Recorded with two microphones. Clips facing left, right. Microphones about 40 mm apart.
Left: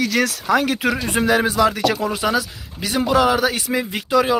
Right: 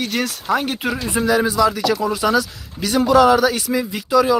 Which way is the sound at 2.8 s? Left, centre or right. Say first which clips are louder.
Right 4 dB; left.